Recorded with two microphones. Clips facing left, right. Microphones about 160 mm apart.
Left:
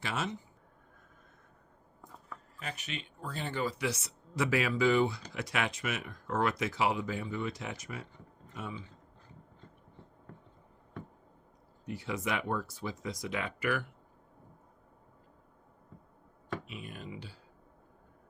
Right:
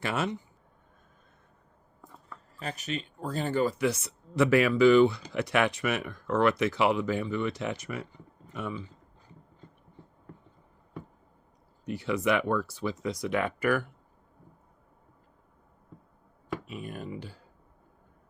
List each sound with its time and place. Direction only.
0.0 s speech: 60° right (ahead or behind)
2.6 s speech: 40° right (ahead or behind); by 8.0 s 70° right (ahead or behind)
11.9 s speech: 75° right (ahead or behind); by 13.8 s 50° right (ahead or behind)
16.6 s speech: 45° right (ahead or behind)